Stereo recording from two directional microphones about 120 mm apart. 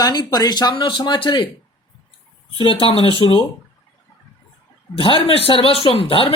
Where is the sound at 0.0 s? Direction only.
35° left (ahead or behind).